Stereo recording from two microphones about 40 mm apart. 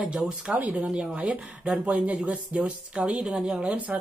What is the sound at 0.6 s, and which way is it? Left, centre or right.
Speech, right.